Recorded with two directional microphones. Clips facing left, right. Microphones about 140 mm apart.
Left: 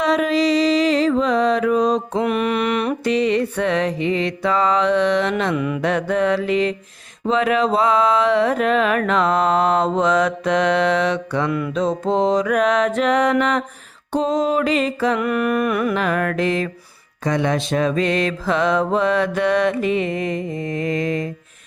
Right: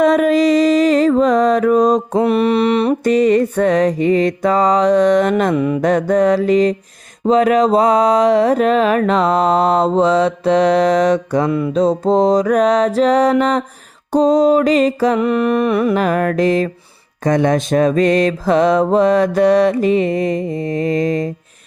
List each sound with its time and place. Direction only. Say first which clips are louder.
0.0 s mantra: right 6 dB; 50° right (ahead or behind); by 2.9 s 30° right (ahead or behind)
3.0 s music: right 5 dB; 45° right (ahead or behind)